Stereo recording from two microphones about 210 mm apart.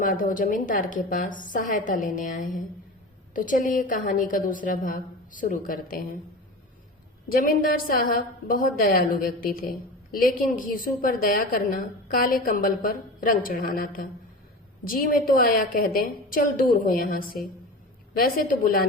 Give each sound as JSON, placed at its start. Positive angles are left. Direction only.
{"t": 0.0, "sound": "a woman's voice", "side_deg": 40}
{"t": 7.3, "sound": "a woman's voice", "side_deg": 40}